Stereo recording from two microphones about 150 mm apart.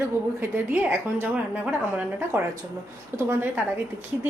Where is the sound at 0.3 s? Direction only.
15° right (ahead or behind).